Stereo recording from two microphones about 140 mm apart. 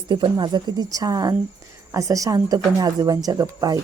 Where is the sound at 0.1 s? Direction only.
35° right (ahead or behind).